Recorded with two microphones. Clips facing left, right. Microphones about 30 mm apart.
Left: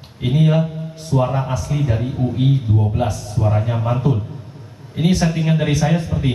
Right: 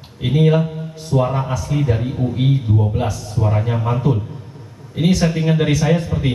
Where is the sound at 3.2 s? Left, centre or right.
Right.